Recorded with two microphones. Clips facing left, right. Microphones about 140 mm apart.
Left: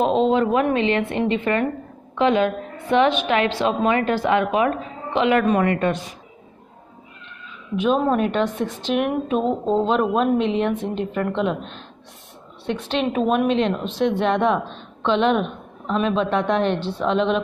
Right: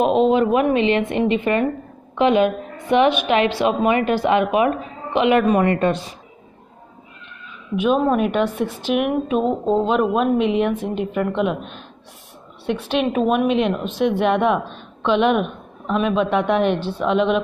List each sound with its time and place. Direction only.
0.0 s a woman's voice: 15° right (ahead or behind)
5.7 s a woman's voice: 30° right (ahead or behind)
7.7 s a woman's voice: 5° right (ahead or behind)